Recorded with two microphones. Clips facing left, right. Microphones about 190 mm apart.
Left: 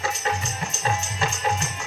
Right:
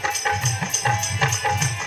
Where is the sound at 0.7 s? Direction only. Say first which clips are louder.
Left 1 dB; 80° right.